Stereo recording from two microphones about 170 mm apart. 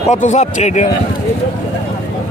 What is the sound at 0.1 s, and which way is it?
Speech, 45° left (ahead or behind).